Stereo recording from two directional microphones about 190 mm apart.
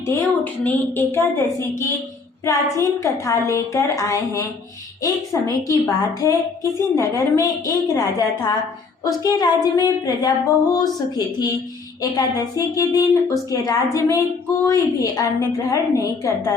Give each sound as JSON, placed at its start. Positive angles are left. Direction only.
{"t": 0.0, "sound": "a woman's voice", "side_deg": 10}
{"t": 9.0, "sound": "a woman's voice", "side_deg": 20}